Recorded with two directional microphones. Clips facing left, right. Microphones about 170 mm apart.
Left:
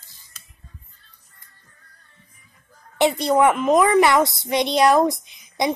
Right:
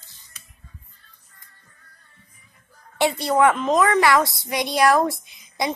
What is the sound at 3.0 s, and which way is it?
A child's voice, 20° left (ahead or behind).